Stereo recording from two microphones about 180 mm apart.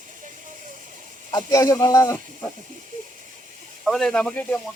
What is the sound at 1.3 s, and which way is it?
Speech, 20° left (ahead or behind).